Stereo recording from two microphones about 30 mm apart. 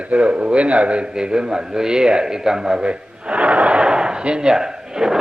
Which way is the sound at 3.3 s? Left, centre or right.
Right.